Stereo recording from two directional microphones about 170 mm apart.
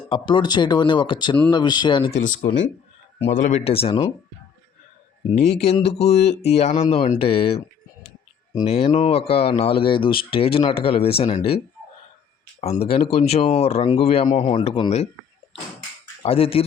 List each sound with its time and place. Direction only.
0.1 s speech: 30° left (ahead or behind)
2.1 s speech: 50° left (ahead or behind); by 4.0 s 35° left (ahead or behind)
5.3 s speech: 40° left (ahead or behind)
8.6 s speech: 35° left (ahead or behind)
12.8 s speech: 35° left (ahead or behind)
16.2 s speech: 35° left (ahead or behind)